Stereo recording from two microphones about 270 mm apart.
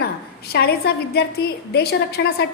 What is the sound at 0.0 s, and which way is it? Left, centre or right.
A woman's voice, left.